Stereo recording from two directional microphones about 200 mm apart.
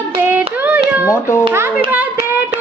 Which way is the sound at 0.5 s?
10° right (ahead or behind).